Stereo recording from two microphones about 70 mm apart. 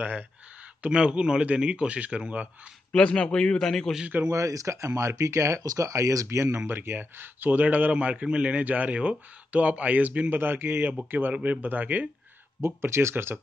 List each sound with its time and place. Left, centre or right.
0.8 s speech: centre
2.9 s a man's voice: centre
4.3 s speech: right
5.6 s speech: right
11.3 s speech: centre
12.6 s speech: right